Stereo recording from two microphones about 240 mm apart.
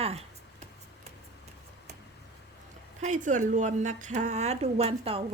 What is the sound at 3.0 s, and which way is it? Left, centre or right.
A woman's voice, right.